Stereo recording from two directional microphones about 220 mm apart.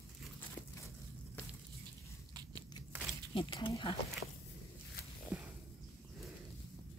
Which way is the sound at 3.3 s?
20° left (ahead or behind).